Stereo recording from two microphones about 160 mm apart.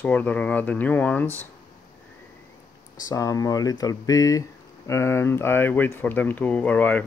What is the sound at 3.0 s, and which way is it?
Speech, 20° left (ahead or behind).